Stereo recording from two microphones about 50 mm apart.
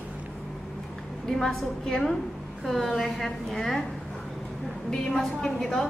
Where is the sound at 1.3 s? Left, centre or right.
Centre.